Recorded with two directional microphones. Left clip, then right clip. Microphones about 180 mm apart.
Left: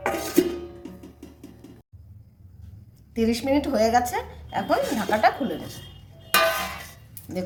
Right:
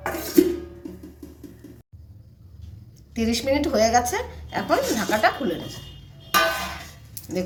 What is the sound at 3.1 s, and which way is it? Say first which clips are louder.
A woman's voice: even; centre (ahead or behind).